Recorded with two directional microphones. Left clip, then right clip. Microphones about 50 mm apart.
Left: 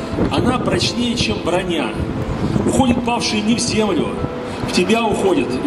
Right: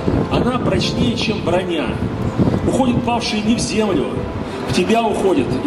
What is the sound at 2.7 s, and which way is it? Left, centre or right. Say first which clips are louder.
A man's voice: left 2 dB; left.